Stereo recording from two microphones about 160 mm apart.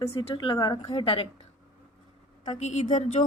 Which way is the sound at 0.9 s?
35° left (ahead or behind).